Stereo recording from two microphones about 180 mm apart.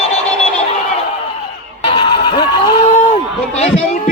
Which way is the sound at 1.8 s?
25° left (ahead or behind).